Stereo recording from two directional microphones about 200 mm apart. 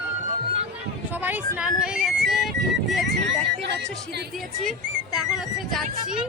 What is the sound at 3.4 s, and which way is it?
Speech, 60° right (ahead or behind).